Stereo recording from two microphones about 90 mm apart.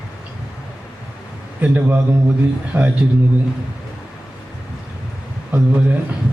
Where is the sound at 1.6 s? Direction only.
20° right (ahead or behind).